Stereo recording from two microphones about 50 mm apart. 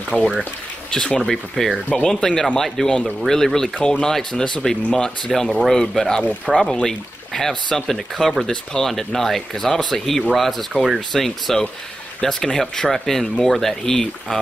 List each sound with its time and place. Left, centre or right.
0.1 s speech: centre
10.7 s speech: centre
11.1 s speech: centre